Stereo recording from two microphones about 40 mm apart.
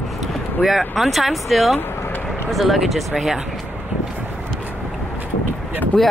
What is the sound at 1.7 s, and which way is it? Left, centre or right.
Vehicle, left.